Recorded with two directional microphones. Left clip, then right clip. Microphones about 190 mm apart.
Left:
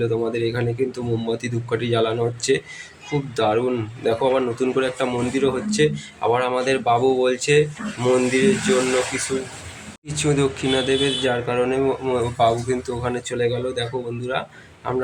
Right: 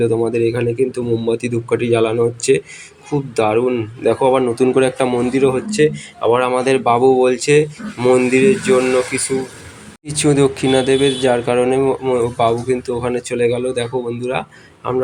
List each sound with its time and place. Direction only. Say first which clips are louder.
0.0 s speech: right 6 dB; 25° right (ahead or behind)